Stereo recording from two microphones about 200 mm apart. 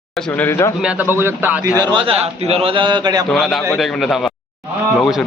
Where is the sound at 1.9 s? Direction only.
30° right (ahead or behind).